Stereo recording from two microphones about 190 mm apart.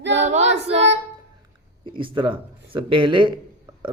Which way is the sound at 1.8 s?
25° right (ahead or behind).